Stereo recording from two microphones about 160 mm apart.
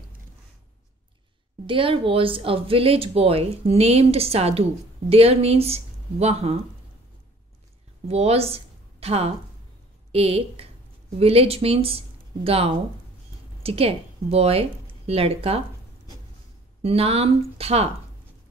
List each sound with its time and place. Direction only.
1.7 s speech: 35° right (ahead or behind)
8.1 s a woman's voice: 40° right (ahead or behind)
16.8 s speech: 40° right (ahead or behind)